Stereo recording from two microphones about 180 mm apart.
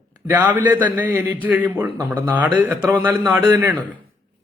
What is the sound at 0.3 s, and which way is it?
A man's voice, 10° right (ahead or behind).